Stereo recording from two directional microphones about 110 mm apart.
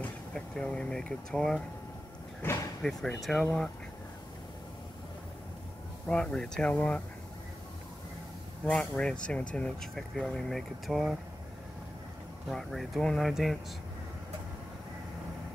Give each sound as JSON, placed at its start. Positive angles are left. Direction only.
{"t": 0.3, "sound": "speech", "side_deg": 5}
{"t": 2.4, "sound": "slam", "side_deg": 20}
{"t": 2.8, "sound": "speech", "side_deg": 5}
{"t": 6.0, "sound": "speech", "side_deg": 10}
{"t": 8.6, "sound": "speech", "side_deg": 5}
{"t": 12.4, "sound": "speech", "side_deg": 0}